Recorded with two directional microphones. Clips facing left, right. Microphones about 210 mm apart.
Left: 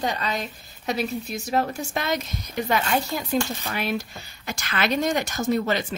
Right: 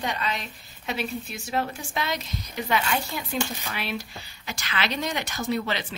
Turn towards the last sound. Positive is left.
turn(degrees=45)  # may be behind; listen again after turning